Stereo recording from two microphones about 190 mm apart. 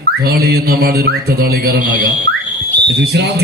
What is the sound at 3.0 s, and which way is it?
Mantra, 60° right (ahead or behind).